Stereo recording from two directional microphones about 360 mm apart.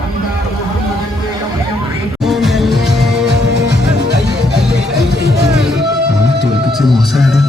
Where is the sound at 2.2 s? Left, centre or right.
Centre.